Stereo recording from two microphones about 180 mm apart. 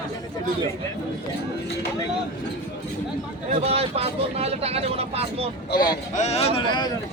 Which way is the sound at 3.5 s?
35° right (ahead or behind).